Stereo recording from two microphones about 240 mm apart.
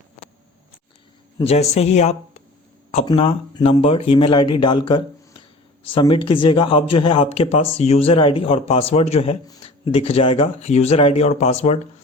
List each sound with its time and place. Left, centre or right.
1.4 s speech: left